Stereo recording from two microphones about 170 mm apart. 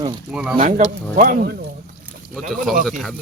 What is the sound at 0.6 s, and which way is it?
Speech, 45° right (ahead or behind).